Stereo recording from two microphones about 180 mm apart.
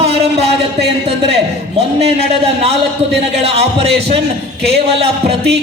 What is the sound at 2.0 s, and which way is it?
A man's voice, 35° right (ahead or behind).